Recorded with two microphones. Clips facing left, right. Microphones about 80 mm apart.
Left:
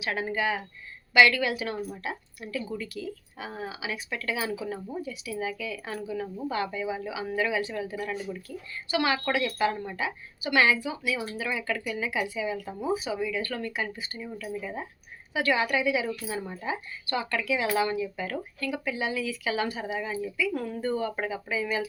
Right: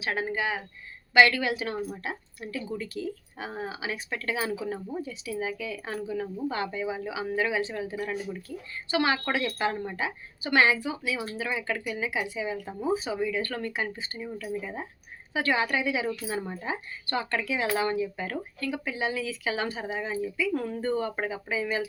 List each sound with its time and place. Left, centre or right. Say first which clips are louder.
0.0 s speech: left 1 dB; right